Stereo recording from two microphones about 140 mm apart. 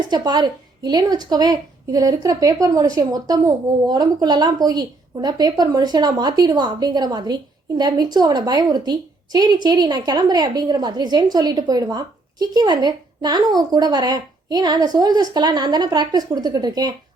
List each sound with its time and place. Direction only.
0.1 s a woman's voice: 30° right (ahead or behind)